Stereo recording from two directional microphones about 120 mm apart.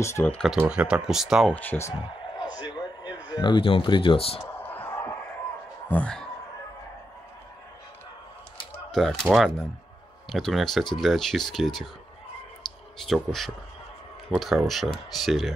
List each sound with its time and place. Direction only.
0.0 s speech: 20° left (ahead or behind)
0.6 s speech: 10° right (ahead or behind)
1.5 s speech: 15° left (ahead or behind)
2.0 s a sound: 35° left (ahead or behind)
4.6 s a sound: 15° left (ahead or behind)
5.9 s speech: 10° left (ahead or behind)
8.9 s speech: 5° left (ahead or behind)
13.0 s speech: centre (ahead or behind)